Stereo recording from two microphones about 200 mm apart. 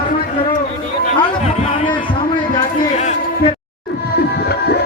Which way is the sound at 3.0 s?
35° left (ahead or behind).